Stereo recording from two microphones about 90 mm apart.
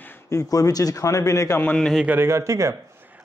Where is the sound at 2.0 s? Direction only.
25° right (ahead or behind).